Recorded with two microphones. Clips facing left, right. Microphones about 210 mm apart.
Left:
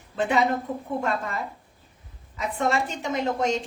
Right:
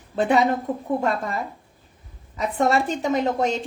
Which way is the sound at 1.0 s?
35° right (ahead or behind).